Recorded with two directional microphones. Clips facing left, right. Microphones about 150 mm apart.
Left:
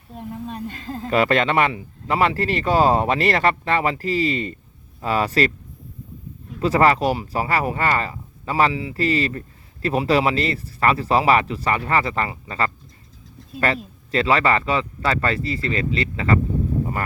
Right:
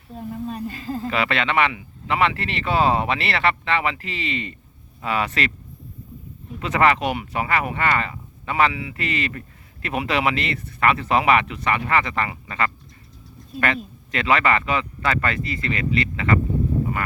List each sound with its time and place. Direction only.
0.2 s speech: centre (ahead or behind)
1.0 s speech: 40° left (ahead or behind)
6.6 s speech: 35° left (ahead or behind)
14.1 s speech: 30° left (ahead or behind)